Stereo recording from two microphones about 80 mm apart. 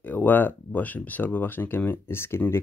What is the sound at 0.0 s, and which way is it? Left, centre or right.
Speech, left.